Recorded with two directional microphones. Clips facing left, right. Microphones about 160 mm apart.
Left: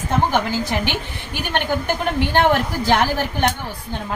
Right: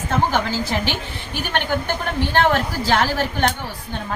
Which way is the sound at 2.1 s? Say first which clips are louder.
Left 1 dB; 15° left (ahead or behind).